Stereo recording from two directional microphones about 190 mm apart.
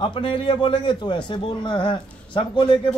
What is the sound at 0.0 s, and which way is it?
A man's voice, 25° left (ahead or behind).